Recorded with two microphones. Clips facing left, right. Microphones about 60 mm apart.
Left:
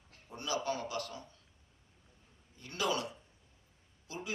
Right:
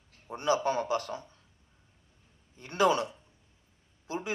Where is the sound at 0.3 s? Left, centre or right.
Right.